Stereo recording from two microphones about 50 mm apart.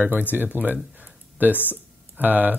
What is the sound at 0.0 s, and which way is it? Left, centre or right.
Speech, right.